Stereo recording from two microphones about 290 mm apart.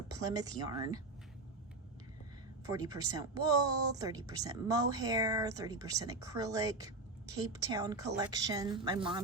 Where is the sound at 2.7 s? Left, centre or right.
Centre.